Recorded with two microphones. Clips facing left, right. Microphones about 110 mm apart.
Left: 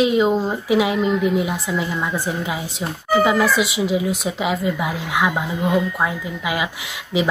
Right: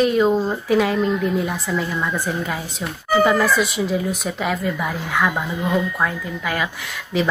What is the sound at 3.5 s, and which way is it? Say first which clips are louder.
Speech: even; 80° left.